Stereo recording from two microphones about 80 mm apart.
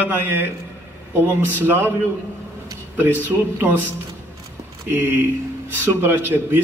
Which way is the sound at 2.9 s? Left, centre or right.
Right.